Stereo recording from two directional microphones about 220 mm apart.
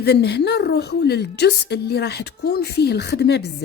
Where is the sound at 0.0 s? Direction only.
45° left (ahead or behind).